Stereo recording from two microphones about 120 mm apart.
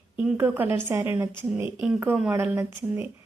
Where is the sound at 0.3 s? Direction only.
15° right (ahead or behind).